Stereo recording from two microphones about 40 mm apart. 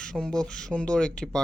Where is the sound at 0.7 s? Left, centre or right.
Left.